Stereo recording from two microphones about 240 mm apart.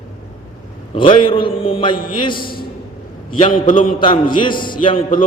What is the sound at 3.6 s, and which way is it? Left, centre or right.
A man's voice, left.